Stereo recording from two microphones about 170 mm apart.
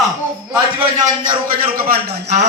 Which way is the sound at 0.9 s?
45° right (ahead or behind).